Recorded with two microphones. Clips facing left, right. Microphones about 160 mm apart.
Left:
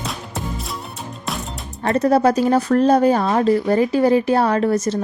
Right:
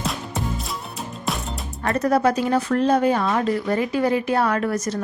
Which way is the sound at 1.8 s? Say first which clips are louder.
Left 4 dB; 30° left (ahead or behind).